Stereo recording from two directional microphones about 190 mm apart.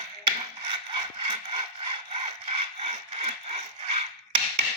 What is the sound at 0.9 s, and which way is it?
Sawing, 30° right (ahead or behind).